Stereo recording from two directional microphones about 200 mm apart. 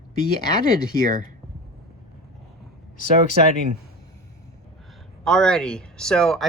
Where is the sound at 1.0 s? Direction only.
45° right (ahead or behind).